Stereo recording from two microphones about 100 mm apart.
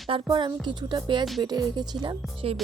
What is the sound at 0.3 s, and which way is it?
Speech, 50° right (ahead or behind).